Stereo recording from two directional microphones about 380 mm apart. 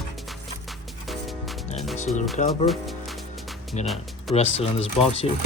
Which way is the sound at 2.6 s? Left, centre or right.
Centre.